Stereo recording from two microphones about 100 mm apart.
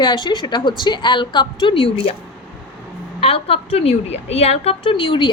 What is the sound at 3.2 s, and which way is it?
A woman's voice, 70° left (ahead or behind).